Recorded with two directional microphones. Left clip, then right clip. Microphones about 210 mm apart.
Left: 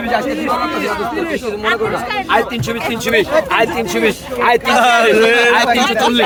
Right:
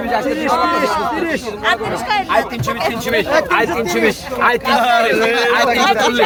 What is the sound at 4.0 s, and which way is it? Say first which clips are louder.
Speech: left 1 dB; 20° left (ahead or behind).